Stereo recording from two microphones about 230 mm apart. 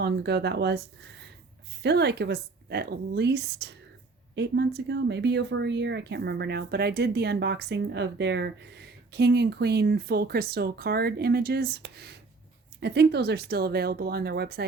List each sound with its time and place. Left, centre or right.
0.0 s speech: right
1.8 s speech: right